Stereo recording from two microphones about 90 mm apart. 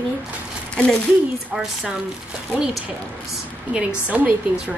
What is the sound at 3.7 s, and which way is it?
Speech, 10° right (ahead or behind).